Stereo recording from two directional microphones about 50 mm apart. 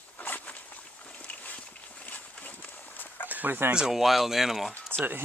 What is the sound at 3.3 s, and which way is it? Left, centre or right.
Chicken, right.